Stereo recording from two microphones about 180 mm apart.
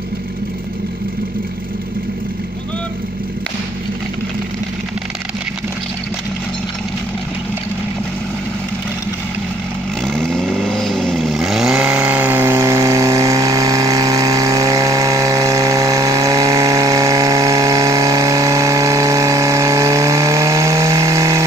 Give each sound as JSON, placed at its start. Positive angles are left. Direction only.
{"t": 10.0, "sound": "vehicle", "side_deg": 0}